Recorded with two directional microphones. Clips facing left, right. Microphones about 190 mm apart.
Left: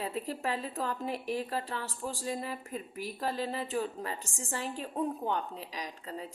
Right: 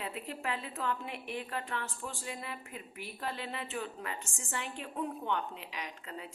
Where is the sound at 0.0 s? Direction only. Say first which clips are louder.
Left 5 dB; 35° left (ahead or behind).